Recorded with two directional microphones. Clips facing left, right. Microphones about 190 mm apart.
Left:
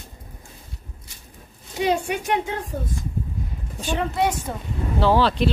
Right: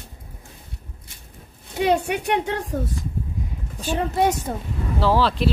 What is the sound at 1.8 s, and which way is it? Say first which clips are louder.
Speech: right 2 dB; 60° right (ahead or behind).